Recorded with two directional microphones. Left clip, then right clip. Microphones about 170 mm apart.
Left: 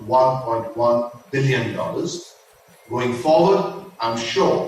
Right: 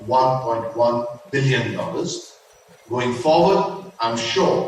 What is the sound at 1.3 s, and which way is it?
Speech, 30° right (ahead or behind).